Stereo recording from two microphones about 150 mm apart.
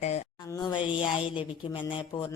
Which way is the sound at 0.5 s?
30° left (ahead or behind).